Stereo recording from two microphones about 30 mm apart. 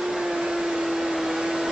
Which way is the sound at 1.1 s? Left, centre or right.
Centre.